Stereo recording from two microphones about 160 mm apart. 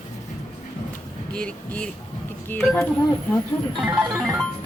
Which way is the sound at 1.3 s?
5° left (ahead or behind).